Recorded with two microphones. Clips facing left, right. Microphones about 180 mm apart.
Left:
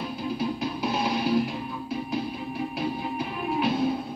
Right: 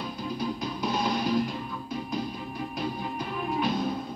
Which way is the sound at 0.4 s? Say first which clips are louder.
Left 2 dB; 5° left (ahead or behind).